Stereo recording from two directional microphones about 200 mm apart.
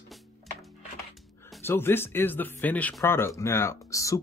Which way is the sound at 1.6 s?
10° left (ahead or behind).